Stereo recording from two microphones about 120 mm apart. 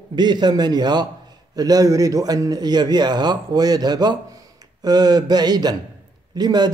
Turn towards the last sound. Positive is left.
turn(degrees=-35)  # may be behind; listen again after turning